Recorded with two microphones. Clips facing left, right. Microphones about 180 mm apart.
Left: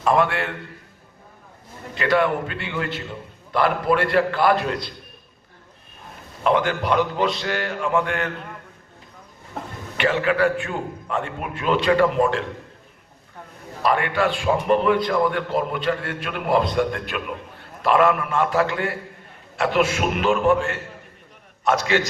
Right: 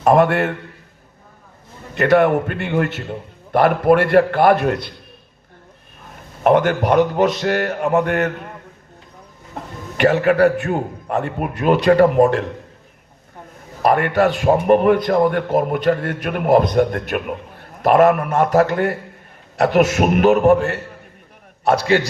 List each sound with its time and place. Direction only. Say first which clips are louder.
0.0 s a man's voice: right 6 dB; 50° right (ahead or behind)
2.0 s a man's voice: right 6 dB; 50° right (ahead or behind)
6.4 s a man's voice: right 6 dB; 50° right (ahead or behind)
10.0 s a man's voice: right 6 dB; 45° right (ahead or behind)
13.8 s a man's voice: right 5 dB; 45° right (ahead or behind)
21.6 s a man's voice: right 4 dB; 35° right (ahead or behind)